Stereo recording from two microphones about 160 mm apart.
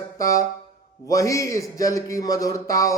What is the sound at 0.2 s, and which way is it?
A man's voice, 20° left (ahead or behind).